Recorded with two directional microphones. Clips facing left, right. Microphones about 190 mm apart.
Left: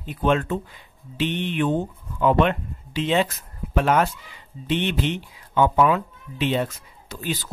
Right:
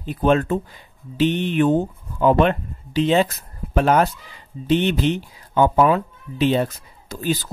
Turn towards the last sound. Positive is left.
turn(degrees=-40)  # may be behind; listen again after turning